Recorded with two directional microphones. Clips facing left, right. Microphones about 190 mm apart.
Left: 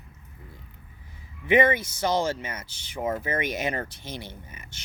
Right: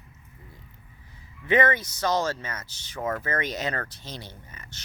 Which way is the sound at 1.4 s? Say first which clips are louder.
Left 2 dB; 10° left (ahead or behind).